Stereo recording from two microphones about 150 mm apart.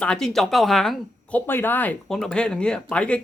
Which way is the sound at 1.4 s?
15° left (ahead or behind).